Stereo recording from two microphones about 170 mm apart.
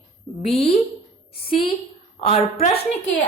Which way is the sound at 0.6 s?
65° left (ahead or behind).